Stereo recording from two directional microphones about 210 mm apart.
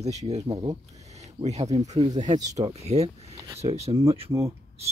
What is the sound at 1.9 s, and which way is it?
Speech, 20° right (ahead or behind).